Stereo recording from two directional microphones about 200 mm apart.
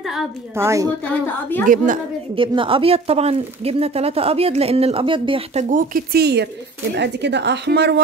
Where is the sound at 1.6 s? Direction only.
40° right (ahead or behind).